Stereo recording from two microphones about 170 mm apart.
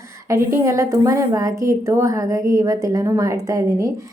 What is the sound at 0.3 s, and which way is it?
A woman's voice, 15° right (ahead or behind).